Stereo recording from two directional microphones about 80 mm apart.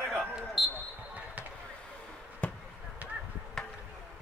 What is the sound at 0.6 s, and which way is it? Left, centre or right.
Speech, centre.